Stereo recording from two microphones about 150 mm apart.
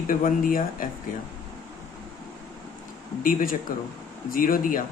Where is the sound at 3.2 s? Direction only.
65° left (ahead or behind).